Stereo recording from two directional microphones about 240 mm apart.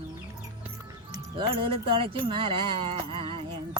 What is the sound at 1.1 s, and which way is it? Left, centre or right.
Speech, right.